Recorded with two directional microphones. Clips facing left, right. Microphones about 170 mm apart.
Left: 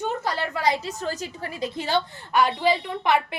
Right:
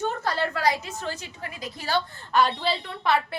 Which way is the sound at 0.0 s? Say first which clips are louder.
Even; 15° left (ahead or behind).